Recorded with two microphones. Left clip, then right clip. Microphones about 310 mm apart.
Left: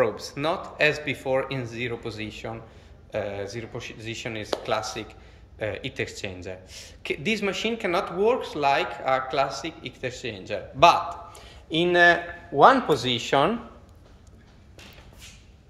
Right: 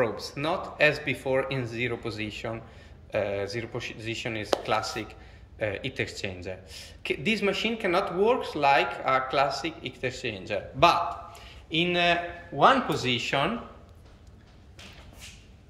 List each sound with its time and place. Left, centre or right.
0.0 s speech: centre
11.3 s a man's voice: centre